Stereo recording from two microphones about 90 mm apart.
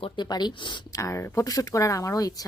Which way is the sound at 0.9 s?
40° left (ahead or behind).